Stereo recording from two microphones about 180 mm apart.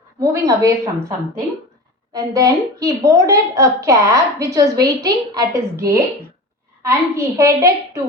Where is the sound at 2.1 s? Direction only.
20° right (ahead or behind).